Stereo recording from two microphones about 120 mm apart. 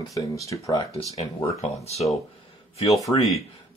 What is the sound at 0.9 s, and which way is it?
Speech, 60° left (ahead or behind).